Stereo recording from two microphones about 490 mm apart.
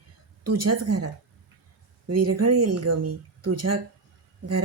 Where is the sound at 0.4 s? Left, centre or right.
Right.